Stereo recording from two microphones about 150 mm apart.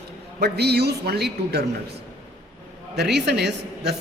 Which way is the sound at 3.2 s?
90° right.